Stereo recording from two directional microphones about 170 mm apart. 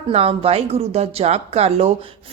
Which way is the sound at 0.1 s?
35° right (ahead or behind).